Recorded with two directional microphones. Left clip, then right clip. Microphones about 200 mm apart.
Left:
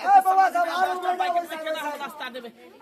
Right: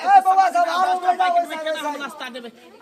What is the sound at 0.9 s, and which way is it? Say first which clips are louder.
A man's voice: right 6 dB; 15° left (ahead or behind).